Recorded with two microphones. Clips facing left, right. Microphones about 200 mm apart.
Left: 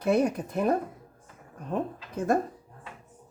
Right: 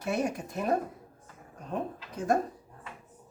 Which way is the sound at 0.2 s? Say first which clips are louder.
Left 5 dB; 55° left (ahead or behind).